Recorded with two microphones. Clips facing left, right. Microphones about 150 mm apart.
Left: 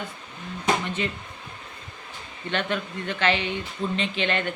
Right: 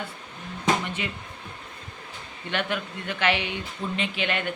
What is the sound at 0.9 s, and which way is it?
Music, 10° right (ahead or behind).